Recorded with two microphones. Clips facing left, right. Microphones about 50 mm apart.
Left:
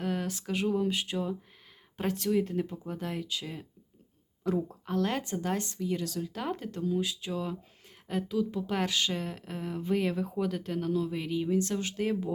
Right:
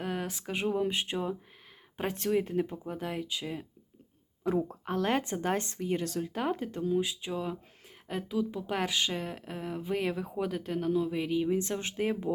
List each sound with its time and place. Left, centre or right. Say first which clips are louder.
0.0 s speech: left 2 dB; centre
2.1 s speech: even; right
2.4 s speech: even; centre
4.4 s speech: right 1 dB; centre
6.5 s speech: even; centre